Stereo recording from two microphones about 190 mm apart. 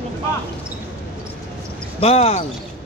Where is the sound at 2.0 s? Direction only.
30° left (ahead or behind).